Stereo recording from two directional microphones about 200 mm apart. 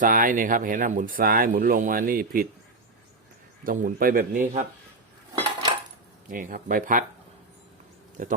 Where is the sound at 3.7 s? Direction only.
45° right (ahead or behind).